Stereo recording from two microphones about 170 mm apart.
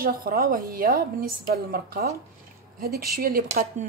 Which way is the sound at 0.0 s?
60° right (ahead or behind).